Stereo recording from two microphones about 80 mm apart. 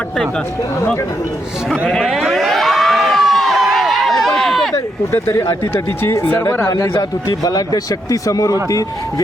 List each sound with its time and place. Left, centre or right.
1.9 s crowd: centre
5.3 s speech: left
6.7 s a man's voice: left